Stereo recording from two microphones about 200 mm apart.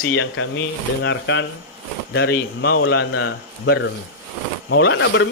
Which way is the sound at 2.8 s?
75° left (ahead or behind).